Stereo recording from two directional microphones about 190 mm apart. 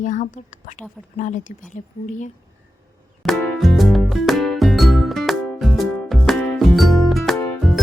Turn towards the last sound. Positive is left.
turn(degrees=0)  # may be behind; listen again after turning